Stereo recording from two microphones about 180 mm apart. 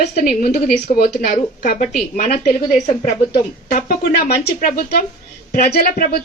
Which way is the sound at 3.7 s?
55° left (ahead or behind).